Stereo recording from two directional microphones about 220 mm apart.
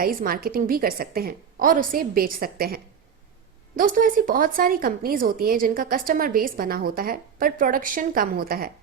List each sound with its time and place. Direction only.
0.0 s speech: 40° right (ahead or behind)